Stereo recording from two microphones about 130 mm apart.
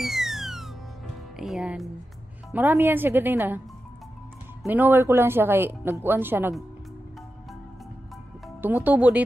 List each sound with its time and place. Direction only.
0.0 s music: centre (ahead or behind)
1.4 s speech: 5° right (ahead or behind)
2.5 s speech: 15° right (ahead or behind)
4.6 s speech: 15° right (ahead or behind)
8.5 s speech: 15° right (ahead or behind)